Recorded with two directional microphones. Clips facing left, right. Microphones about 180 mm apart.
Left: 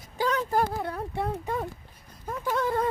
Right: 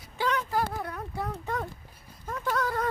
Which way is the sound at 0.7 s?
25° left (ahead or behind).